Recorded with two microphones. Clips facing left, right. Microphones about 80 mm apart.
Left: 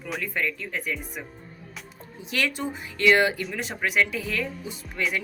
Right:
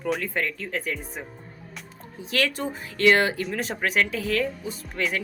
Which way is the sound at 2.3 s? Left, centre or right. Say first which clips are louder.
Right 2 dB; right.